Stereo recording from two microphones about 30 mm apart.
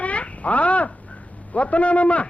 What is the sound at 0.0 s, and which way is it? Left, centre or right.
Babbling, left.